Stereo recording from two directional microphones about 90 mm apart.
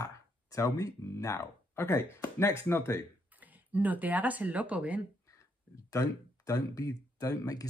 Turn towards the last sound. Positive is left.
turn(degrees=40)  # may be behind; listen again after turning